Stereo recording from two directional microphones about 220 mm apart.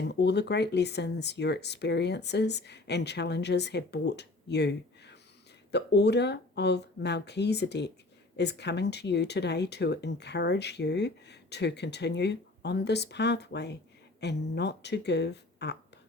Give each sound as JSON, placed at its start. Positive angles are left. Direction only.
{"t": 0.1, "sound": "speech", "side_deg": 50}